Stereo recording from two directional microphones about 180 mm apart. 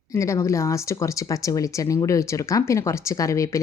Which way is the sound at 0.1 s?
15° left (ahead or behind).